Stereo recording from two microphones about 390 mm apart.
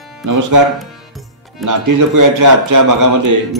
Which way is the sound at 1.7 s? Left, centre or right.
Right.